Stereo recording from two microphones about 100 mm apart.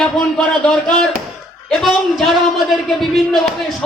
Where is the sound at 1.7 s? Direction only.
5° left (ahead or behind).